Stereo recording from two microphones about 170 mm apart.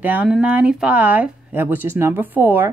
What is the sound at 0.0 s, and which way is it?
Speech, 10° right (ahead or behind).